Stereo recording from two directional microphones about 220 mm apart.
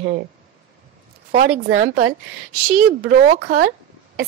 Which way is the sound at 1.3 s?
40° right (ahead or behind).